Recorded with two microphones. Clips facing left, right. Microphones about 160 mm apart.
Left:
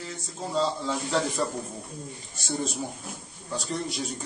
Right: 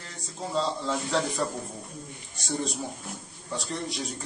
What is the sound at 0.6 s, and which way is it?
A man's voice, centre (ahead or behind).